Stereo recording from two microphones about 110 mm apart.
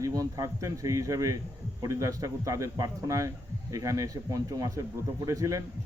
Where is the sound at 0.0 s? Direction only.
30° right (ahead or behind).